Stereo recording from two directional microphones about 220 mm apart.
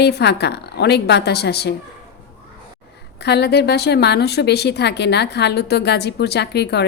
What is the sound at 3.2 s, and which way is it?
Speech, 50° left (ahead or behind).